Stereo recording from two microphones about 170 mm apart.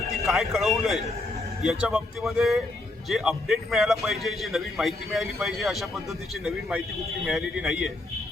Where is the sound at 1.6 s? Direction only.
5° right (ahead or behind).